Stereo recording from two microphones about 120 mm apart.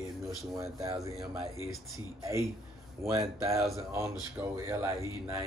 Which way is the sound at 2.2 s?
25° right (ahead or behind).